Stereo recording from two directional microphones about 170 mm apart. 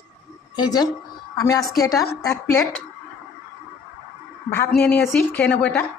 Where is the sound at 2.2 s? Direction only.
20° left (ahead or behind).